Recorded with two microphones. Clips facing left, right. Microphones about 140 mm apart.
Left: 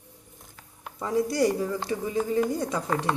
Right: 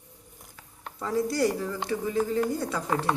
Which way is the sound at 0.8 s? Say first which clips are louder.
Left 1 dB; 15° left (ahead or behind).